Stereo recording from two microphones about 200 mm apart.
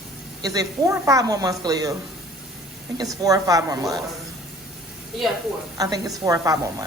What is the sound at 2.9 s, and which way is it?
A woman's voice, 15° right (ahead or behind).